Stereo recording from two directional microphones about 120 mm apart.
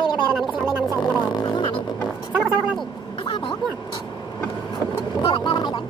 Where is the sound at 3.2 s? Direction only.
45° left (ahead or behind).